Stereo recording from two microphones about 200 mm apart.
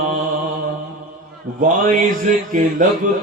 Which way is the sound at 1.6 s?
40° right (ahead or behind).